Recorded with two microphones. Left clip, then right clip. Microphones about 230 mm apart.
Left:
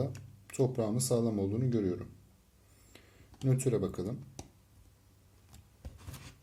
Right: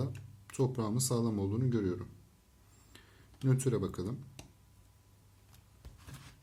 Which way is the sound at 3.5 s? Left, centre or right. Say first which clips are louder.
Left 2 dB; right.